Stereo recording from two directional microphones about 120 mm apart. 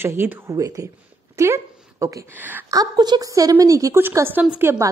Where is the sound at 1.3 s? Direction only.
25° right (ahead or behind).